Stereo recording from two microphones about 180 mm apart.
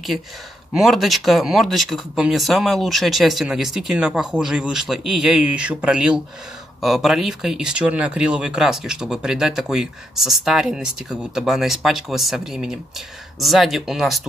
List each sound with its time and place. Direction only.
0.7 s speech: centre (ahead or behind)